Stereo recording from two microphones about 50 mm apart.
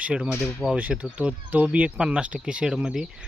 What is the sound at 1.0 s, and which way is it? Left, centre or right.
Speech, right.